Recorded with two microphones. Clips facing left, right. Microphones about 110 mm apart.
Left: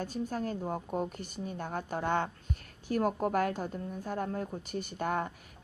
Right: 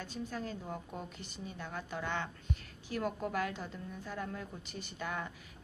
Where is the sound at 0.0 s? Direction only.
45° left (ahead or behind).